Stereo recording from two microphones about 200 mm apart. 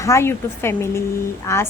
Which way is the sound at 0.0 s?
15° left (ahead or behind).